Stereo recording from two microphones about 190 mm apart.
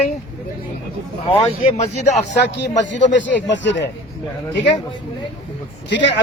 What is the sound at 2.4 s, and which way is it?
Speech, 65° left (ahead or behind).